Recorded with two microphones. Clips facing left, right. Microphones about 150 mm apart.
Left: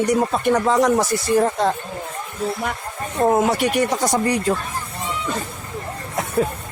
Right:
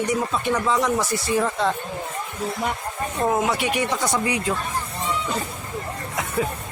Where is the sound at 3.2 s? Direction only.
40° left (ahead or behind).